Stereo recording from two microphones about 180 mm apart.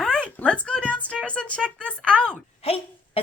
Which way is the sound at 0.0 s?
5° left (ahead or behind).